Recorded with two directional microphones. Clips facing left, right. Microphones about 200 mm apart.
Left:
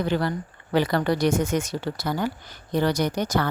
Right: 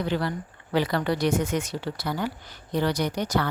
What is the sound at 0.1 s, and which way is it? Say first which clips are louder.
Speech: left 3 dB; 50° left (ahead or behind).